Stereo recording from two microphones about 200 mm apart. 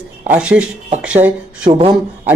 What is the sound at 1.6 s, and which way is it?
Speech, 30° right (ahead or behind).